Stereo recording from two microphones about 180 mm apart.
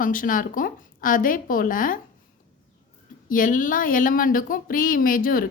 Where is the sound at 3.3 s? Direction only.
50° left (ahead or behind).